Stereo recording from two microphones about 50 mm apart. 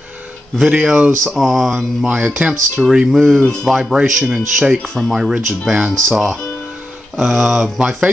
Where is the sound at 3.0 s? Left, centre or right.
Centre.